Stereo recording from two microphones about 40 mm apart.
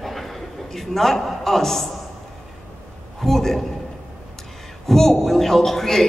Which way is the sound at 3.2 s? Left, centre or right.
Centre.